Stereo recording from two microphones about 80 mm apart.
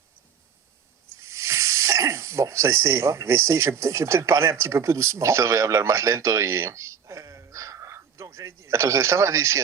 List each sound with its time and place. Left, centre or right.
1.3 s speech: right